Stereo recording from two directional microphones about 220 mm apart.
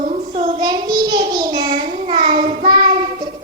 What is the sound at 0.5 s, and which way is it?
Child singing, 15° right (ahead or behind).